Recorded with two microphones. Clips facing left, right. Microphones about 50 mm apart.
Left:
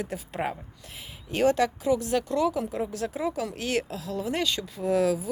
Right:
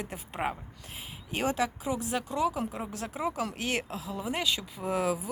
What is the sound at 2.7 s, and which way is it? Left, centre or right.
Speech, right.